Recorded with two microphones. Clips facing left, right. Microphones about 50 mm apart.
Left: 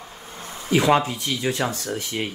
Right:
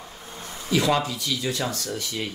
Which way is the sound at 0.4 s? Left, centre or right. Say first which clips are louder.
Left 3 dB; left.